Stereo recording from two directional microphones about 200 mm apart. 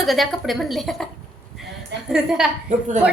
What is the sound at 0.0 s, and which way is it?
A woman's voice, centre (ahead or behind).